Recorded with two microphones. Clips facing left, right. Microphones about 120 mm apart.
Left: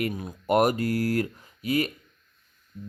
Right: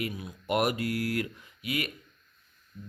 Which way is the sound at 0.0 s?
45° left (ahead or behind).